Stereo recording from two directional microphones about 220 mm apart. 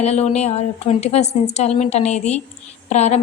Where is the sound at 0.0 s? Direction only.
30° left (ahead or behind).